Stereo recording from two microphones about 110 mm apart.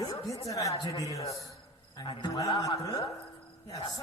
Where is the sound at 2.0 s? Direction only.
50° left (ahead or behind).